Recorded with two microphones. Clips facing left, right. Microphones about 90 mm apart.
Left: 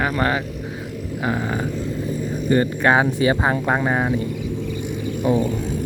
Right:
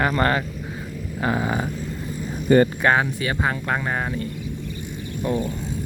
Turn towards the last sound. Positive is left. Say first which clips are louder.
# left 5 dB
turn(degrees=5)  # may be behind; listen again after turning